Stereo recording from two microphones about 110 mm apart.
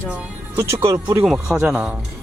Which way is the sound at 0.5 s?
25° right (ahead or behind).